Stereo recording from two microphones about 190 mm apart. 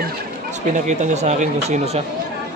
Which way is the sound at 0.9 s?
35° right (ahead or behind).